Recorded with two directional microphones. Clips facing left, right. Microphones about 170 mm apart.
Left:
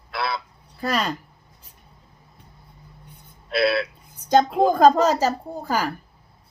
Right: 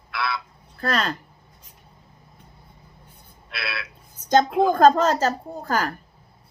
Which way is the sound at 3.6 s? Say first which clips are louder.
Left 14 dB; 30° left (ahead or behind).